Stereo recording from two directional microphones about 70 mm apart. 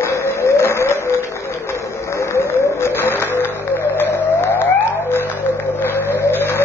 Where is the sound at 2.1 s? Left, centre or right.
Left.